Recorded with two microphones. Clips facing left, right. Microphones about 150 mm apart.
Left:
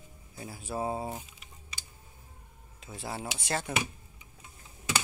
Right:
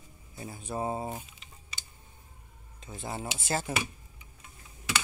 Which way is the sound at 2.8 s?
Centre (ahead or behind).